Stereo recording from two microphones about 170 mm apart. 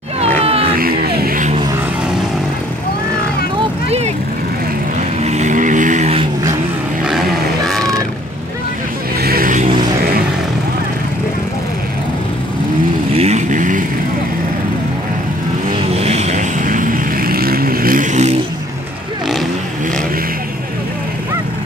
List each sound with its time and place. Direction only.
0.4 s a sound: 35° right (ahead or behind)
0.7 s music: 60° right (ahead or behind)
5.2 s vehicle: 40° right (ahead or behind)
7.1 s wild animals: centre (ahead or behind)
9.2 s vehicle: 60° right (ahead or behind)
13.1 s vehicle: 40° right (ahead or behind)
15.9 s vehicle: 40° right (ahead or behind)